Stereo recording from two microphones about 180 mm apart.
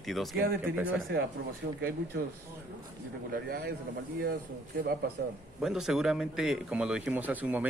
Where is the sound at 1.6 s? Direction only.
70° right (ahead or behind).